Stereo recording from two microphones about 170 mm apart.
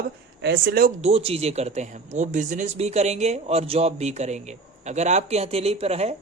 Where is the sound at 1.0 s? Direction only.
35° right (ahead or behind).